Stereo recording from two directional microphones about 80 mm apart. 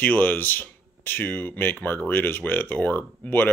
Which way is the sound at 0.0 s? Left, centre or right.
Left.